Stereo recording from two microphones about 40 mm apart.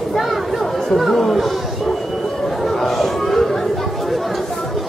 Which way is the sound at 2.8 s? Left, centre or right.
Centre.